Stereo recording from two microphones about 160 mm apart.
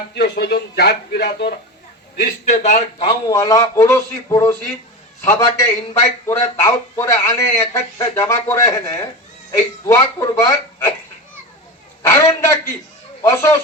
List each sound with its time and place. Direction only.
0.1 s speech: 90° left
2.5 s a man's voice: 50° left (ahead or behind)
3.0 s a man's voice: 30° left (ahead or behind)
12.0 s a sound: 15° left (ahead or behind)
13.2 s speech: 15° left (ahead or behind)